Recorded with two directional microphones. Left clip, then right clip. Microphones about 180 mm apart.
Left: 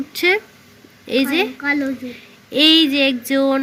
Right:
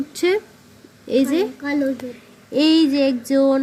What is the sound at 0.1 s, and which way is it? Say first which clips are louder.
Speech: left 4 dB; 15° right (ahead or behind).